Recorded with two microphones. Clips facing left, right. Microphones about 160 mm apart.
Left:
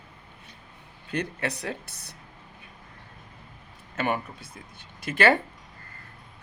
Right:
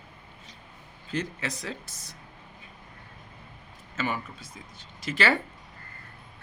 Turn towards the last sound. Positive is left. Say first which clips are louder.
# left 4 dB
turn(degrees=55)  # may be behind; listen again after turning